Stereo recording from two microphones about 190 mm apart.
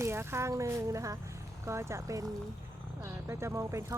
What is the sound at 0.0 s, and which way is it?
Speech, 15° right (ahead or behind).